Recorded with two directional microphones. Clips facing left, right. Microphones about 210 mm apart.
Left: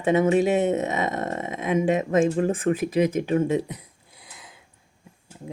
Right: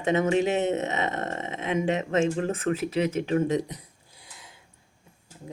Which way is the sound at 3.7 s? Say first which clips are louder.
Left 2 dB; 30° right (ahead or behind).